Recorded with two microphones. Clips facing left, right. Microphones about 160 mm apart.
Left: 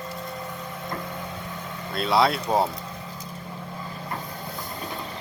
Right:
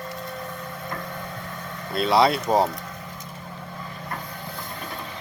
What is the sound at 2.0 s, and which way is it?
Speech, centre (ahead or behind).